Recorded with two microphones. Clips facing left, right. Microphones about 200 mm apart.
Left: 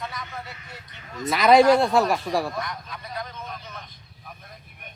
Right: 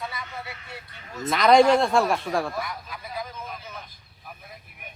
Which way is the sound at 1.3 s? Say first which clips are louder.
Left 1 dB; 5° left (ahead or behind).